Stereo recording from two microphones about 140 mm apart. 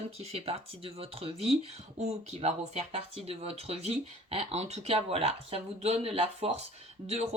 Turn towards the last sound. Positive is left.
turn(degrees=-50)  # may be behind; listen again after turning